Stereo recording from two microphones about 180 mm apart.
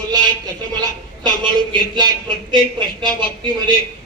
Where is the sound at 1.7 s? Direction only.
25° right (ahead or behind).